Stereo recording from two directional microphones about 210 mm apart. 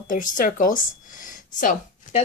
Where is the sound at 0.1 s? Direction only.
40° left (ahead or behind).